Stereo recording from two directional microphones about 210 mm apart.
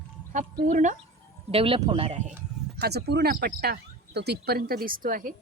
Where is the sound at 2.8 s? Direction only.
50° right (ahead or behind).